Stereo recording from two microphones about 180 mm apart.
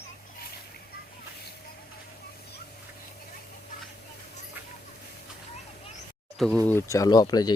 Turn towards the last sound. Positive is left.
turn(degrees=20)  # may be behind; listen again after turning